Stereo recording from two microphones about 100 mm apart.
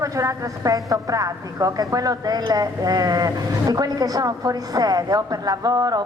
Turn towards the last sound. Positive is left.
turn(degrees=-40)  # may be behind; listen again after turning